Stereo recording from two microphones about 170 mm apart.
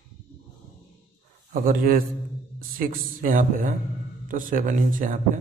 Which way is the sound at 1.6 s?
55° right (ahead or behind).